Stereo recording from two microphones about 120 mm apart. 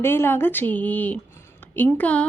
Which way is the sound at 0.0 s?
20° left (ahead or behind).